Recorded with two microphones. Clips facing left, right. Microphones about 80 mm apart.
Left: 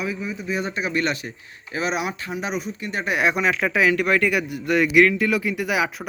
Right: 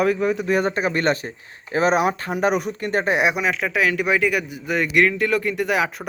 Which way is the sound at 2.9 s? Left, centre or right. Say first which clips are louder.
Right 5 dB; right.